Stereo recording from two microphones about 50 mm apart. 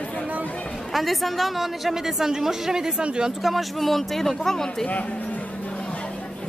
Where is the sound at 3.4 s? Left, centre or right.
Centre.